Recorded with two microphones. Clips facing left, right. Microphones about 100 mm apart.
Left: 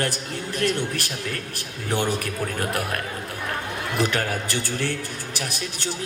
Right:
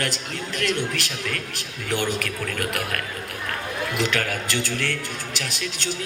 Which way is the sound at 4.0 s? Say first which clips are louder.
Left 2 dB; 20° left (ahead or behind).